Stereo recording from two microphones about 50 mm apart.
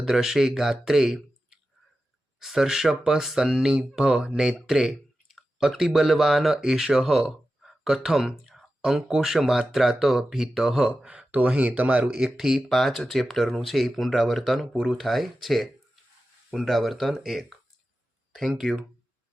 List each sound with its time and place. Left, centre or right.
0.0 s speech: centre
11.0 s speech: centre
11.3 s speech: right
12.2 s speech: centre
12.5 s speech: centre